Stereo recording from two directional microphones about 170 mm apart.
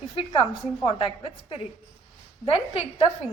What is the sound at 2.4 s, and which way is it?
Speech, 35° left (ahead or behind).